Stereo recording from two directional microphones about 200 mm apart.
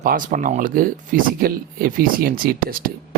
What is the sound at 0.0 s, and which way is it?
Speech, 40° right (ahead or behind).